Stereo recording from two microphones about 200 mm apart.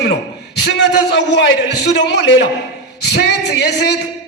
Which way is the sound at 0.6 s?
60° left (ahead or behind).